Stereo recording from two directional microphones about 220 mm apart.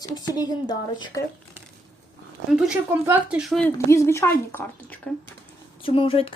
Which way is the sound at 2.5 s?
5° right (ahead or behind).